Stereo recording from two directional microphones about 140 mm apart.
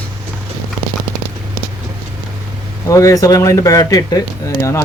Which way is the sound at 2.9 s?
25° left (ahead or behind).